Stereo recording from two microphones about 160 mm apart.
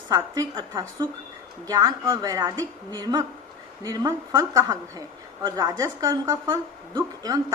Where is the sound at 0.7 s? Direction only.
20° right (ahead or behind).